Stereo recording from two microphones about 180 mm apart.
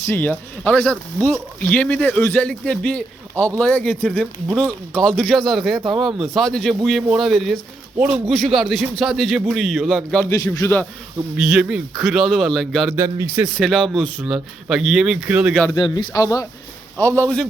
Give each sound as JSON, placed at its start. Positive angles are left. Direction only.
{"t": 0.0, "sound": "a man's voice", "side_deg": 10}
{"t": 10.2, "sound": "speech", "side_deg": 15}
{"t": 11.3, "sound": "a man's voice", "side_deg": 0}
{"t": 13.0, "sound": "speech", "side_deg": -15}
{"t": 13.6, "sound": "a man's voice", "side_deg": 0}
{"t": 15.7, "sound": "a man's voice", "side_deg": 25}